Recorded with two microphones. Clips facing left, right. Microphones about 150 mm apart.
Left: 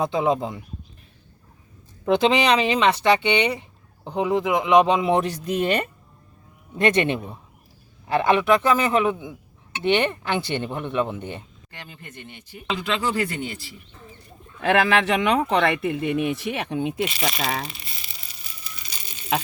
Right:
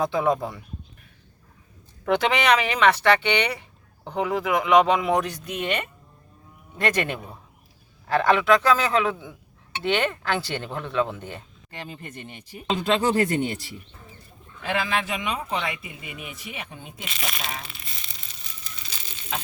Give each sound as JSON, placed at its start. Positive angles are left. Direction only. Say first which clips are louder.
{"t": 0.0, "sound": "speech", "louder": "left 1 dB", "side_deg": 20}
{"t": 2.0, "sound": "speech", "louder": "left 2 dB", "side_deg": 20}
{"t": 6.7, "sound": "speech", "louder": "left 5 dB", "side_deg": 25}
{"t": 11.9, "sound": "speech", "louder": "right 3 dB", "side_deg": -25}
{"t": 12.6, "sound": "speech", "louder": "right 3 dB", "side_deg": -40}
{"t": 14.6, "sound": "speech", "louder": "left 7 dB", "side_deg": 65}
{"t": 17.7, "sound": "crumpling", "louder": "left 1 dB", "side_deg": 5}
{"t": 18.6, "sound": "pigeon", "louder": "left 1 dB", "side_deg": 10}